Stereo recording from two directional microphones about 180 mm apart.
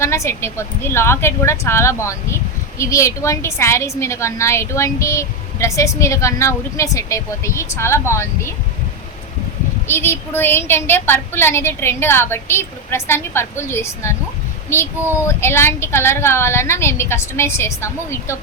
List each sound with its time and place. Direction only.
0.0 s speech: 15° left (ahead or behind)
9.8 s speech: 15° left (ahead or behind)